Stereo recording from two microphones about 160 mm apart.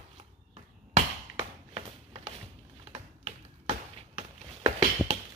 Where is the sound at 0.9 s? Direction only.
40° right (ahead or behind).